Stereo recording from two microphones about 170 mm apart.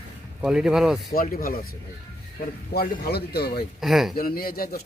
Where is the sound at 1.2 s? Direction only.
55° left (ahead or behind).